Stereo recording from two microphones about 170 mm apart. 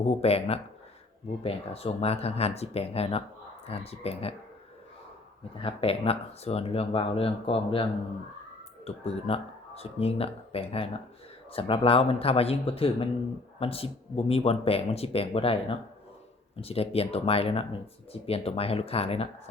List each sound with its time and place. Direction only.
0.0 s speech: 35° left (ahead or behind)
5.5 s speech: 35° left (ahead or behind)
16.6 s speech: 35° left (ahead or behind)